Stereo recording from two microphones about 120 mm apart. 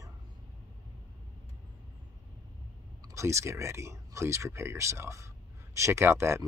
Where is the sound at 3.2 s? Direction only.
25° right (ahead or behind).